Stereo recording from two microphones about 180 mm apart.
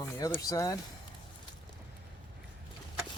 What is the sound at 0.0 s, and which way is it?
Speech, 20° left (ahead or behind).